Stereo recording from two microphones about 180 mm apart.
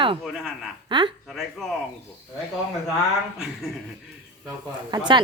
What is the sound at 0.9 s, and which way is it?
Speech, 25° right (ahead or behind).